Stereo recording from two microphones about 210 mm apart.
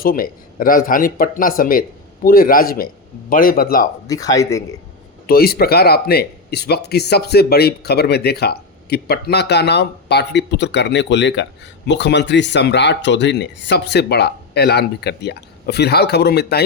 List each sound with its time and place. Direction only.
0.0 s speech: 40° left (ahead or behind)
4.0 s speech: 15° left (ahead or behind)
5.2 s speech: 45° left (ahead or behind)